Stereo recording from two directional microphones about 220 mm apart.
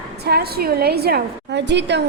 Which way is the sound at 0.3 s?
45° right (ahead or behind).